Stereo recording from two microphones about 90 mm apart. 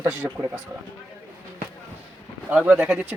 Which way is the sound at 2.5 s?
15° right (ahead or behind).